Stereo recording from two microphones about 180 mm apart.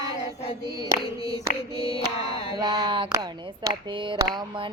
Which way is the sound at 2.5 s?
25° right (ahead or behind).